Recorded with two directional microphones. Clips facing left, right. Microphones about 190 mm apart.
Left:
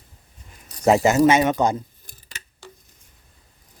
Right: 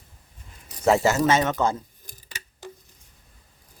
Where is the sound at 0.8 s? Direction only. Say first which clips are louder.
Left 4 dB; 15° left (ahead or behind).